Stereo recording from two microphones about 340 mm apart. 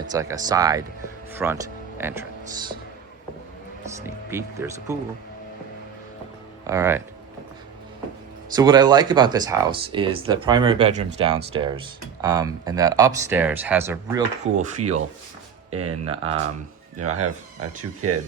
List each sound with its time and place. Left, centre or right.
0.1 s speech: centre
3.8 s speech: centre
6.7 s speech: centre
8.5 s speech: centre
14.4 s speech: right
15.7 s speech: right
16.0 s speech: centre
17.0 s speech: right